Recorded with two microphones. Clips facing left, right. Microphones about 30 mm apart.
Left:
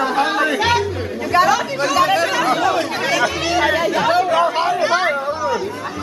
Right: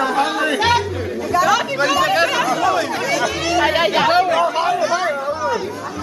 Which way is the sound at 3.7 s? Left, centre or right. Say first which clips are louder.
Right 2 dB; right.